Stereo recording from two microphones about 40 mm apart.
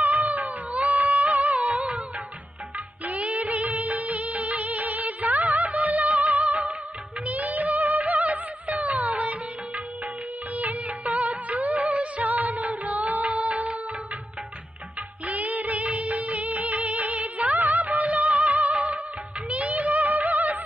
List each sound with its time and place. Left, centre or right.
0.0 s music: right
3.1 s music of bollywood: right
7.2 s music: right
10.5 s music: right
15.2 s music of bollywood: right
19.5 s music: right